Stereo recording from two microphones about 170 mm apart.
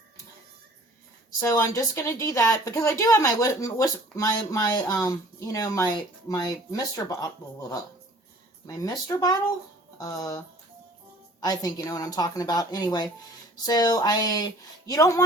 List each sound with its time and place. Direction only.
1.4 s a woman's voice: 20° left (ahead or behind)
8.6 s a woman's voice: 20° left (ahead or behind)